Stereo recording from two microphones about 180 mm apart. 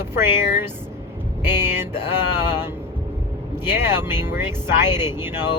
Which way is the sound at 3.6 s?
10° right (ahead or behind).